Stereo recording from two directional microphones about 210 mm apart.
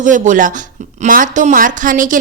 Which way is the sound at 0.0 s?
35° right (ahead or behind).